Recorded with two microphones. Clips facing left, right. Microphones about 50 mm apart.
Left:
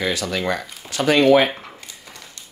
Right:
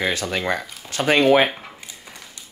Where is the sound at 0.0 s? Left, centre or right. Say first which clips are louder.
Even; right.